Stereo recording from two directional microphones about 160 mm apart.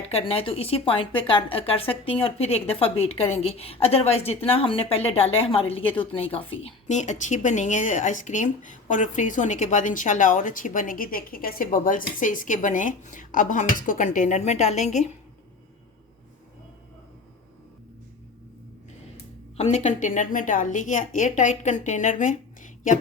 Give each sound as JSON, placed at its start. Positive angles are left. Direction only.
{"t": 0.1, "sound": "a woman's voice", "side_deg": 40}
{"t": 19.5, "sound": "a woman's voice", "side_deg": 45}